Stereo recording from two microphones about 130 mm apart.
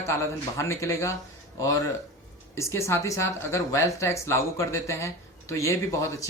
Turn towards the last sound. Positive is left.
turn(degrees=25)  # may be behind; listen again after turning